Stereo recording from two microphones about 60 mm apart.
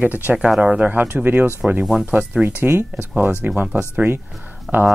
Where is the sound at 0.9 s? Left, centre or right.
Right.